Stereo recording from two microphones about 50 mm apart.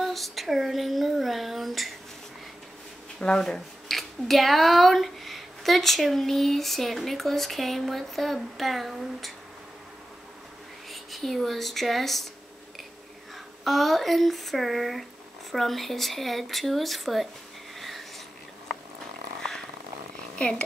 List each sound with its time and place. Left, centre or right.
0.0 s speech: centre
3.2 s speech: centre
3.9 s speech: centre
10.9 s speech: centre
13.7 s speech: centre
17.7 s a sound: centre
20.3 s speech: left